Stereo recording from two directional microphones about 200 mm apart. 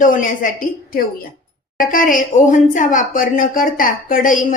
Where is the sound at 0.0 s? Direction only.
40° left (ahead or behind).